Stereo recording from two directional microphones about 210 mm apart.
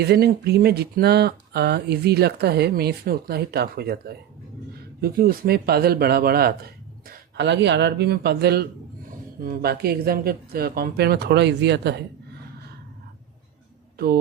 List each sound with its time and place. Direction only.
0.0 s speech: 50° right (ahead or behind)